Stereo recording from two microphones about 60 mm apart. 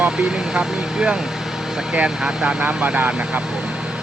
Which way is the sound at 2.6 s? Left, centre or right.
Right.